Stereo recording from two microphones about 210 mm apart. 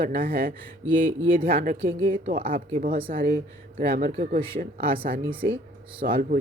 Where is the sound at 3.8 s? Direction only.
40° right (ahead or behind).